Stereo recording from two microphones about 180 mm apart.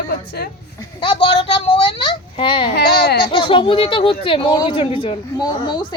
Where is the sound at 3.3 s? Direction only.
30° left (ahead or behind).